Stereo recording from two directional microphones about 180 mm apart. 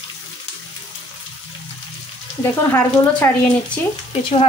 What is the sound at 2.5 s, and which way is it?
Speech, 15° left (ahead or behind).